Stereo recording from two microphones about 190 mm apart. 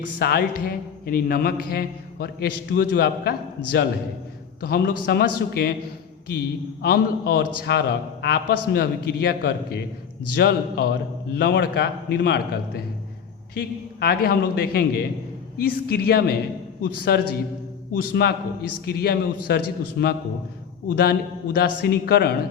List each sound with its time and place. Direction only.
0.2 s a man's voice: 55° left (ahead or behind)
6.8 s a man's voice: 55° left (ahead or behind)